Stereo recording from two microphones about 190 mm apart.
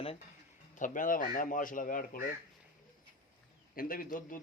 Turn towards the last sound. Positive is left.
turn(degrees=45)  # may be behind; listen again after turning